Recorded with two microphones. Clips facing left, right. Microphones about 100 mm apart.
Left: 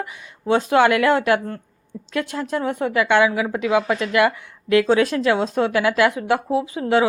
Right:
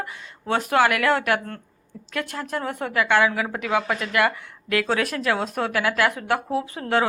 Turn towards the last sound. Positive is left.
turn(degrees=15)  # may be behind; listen again after turning